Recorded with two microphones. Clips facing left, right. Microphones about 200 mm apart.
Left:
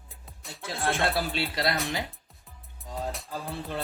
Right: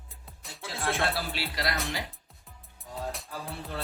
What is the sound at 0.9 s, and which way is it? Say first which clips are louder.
Speech: left 3 dB; 20° left (ahead or behind).